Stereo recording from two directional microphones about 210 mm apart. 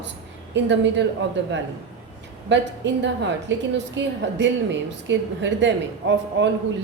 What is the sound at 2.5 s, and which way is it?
A woman's voice, 60° right (ahead or behind).